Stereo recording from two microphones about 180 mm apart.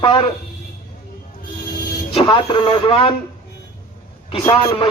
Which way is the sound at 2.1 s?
30° left (ahead or behind).